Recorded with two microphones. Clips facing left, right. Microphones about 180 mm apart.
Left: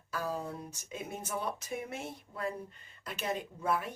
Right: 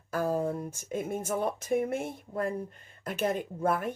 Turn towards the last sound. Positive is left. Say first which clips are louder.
# right 5 dB
turn(degrees=-50)  # may be behind; listen again after turning